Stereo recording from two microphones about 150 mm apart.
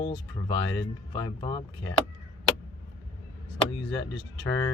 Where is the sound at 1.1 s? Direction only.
30° left (ahead or behind).